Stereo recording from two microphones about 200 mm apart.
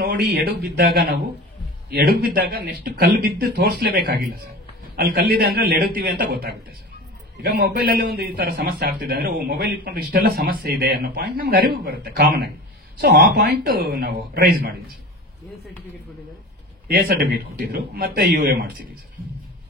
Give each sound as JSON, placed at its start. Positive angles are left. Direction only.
{"t": 0.0, "sound": "a man's voice", "side_deg": -50}
{"t": 16.8, "sound": "a man's voice", "side_deg": -50}